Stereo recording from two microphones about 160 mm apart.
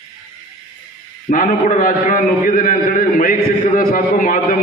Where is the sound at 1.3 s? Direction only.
55° left (ahead or behind).